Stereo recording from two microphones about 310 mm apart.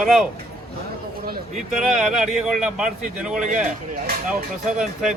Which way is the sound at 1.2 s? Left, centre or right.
Right.